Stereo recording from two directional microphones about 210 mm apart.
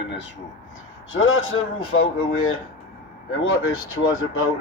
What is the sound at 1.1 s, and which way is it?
Speech, 70° left (ahead or behind).